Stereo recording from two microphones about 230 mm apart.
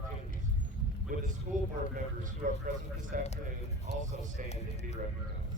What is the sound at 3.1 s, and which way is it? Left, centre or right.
Speech, right.